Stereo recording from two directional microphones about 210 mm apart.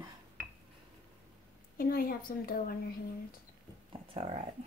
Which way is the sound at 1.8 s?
45° left (ahead or behind).